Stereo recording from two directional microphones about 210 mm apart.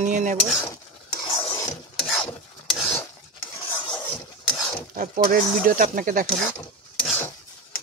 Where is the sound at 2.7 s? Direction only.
Centre (ahead or behind).